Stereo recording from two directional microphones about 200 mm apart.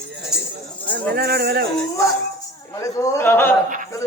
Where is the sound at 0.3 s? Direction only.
5° right (ahead or behind).